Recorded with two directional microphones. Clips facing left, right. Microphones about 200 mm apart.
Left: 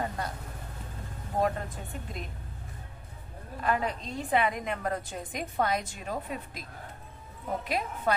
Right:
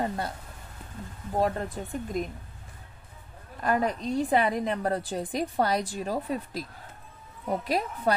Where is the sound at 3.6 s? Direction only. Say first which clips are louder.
Right 4 dB; 40° right (ahead or behind).